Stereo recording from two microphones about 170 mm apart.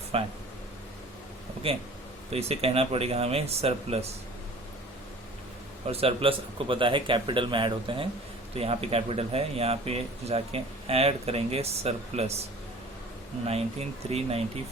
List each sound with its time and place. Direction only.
0.1 s speech: 35° right (ahead or behind)
1.6 s speech: 35° right (ahead or behind)
5.9 s speech: 35° right (ahead or behind)
13.5 s speech: 35° right (ahead or behind)